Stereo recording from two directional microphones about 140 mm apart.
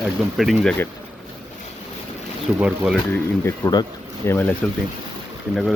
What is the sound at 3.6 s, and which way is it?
Speech, 20° left (ahead or behind).